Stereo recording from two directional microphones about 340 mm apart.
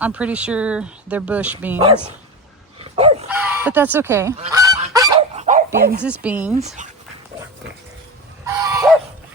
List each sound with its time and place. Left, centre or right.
0.0 s speech: centre
2.8 s dog: centre
3.2 s goose: centre
4.8 s dog: centre
6.0 s speech: centre
6.5 s speech: centre
8.4 s dog: centre